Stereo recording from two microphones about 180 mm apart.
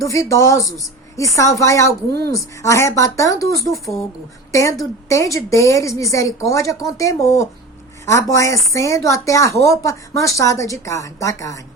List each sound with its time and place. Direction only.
0.0 s a woman's voice: 15° left (ahead or behind)